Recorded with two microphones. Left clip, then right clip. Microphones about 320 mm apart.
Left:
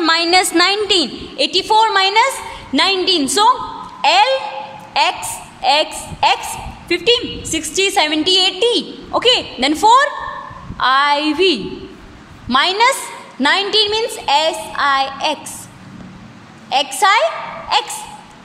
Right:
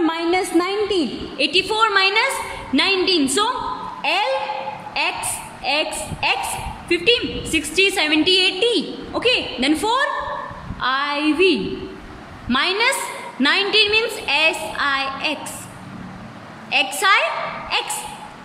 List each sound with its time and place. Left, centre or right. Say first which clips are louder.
0.0 s a sound: left 7 dB; left
1.4 s a woman's voice: left 4 dB; centre
16.6 s a woman's voice: left 4 dB; left